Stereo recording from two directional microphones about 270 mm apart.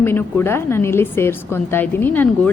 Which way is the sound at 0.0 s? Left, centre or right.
Centre.